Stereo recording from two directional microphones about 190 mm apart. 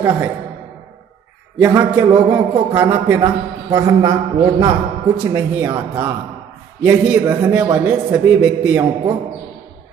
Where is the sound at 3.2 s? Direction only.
30° right (ahead or behind).